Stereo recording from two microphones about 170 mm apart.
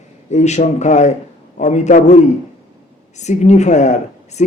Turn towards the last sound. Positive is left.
turn(degrees=45)  # may be behind; listen again after turning